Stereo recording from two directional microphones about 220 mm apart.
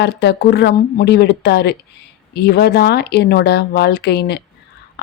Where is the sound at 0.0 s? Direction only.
50° left (ahead or behind).